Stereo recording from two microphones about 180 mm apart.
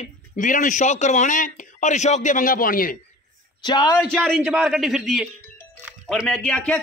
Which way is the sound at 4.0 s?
Centre (ahead or behind).